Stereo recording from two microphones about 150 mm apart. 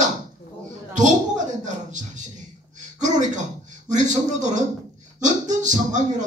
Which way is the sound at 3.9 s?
55° right (ahead or behind).